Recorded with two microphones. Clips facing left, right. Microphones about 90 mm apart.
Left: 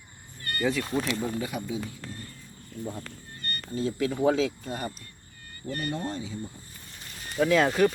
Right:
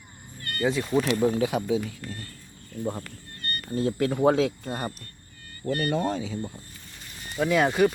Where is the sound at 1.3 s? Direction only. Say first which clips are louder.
Right 7 dB; 80° right.